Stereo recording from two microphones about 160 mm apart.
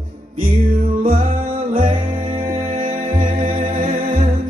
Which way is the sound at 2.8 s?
55° right (ahead or behind).